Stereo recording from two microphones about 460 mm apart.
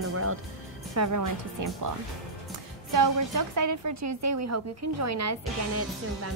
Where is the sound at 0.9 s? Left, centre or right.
Right.